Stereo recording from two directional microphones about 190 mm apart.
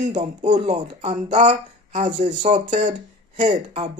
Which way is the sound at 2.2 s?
25° right (ahead or behind).